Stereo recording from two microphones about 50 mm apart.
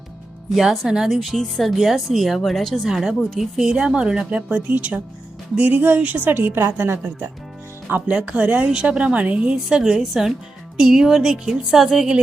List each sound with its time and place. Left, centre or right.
0.5 s speech: centre
0.9 s a woman's voice: centre
1.1 s speech: centre
1.7 s speech: centre
2.9 s a woman's voice: centre; by 6.6 s right
6.6 s a woman's voice: right
7.9 s speech: right
8.1 s a woman's voice: right